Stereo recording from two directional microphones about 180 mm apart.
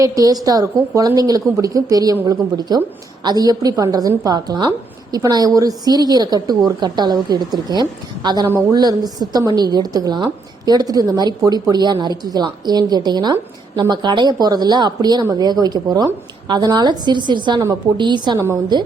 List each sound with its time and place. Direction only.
0.0 s a woman's voice: 20° right (ahead or behind)